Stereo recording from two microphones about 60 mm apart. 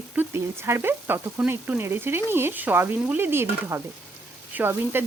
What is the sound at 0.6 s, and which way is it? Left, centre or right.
Speech, right.